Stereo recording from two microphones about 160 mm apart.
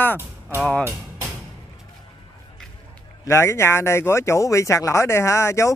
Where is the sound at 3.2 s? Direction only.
15° left (ahead or behind).